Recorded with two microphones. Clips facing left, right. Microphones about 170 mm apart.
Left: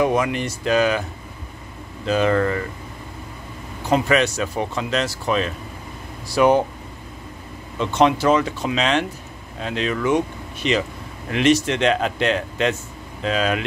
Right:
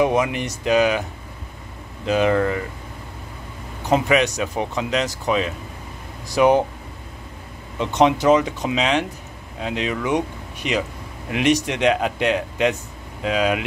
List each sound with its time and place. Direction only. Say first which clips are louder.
0.0 s speech: even; 15° right (ahead or behind)
2.0 s speech: even; 15° right (ahead or behind)
3.9 s speech: even; 15° right (ahead or behind)
7.8 s speech: even; 15° right (ahead or behind)